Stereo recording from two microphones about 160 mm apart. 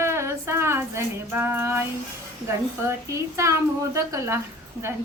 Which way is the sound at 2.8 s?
20° right (ahead or behind).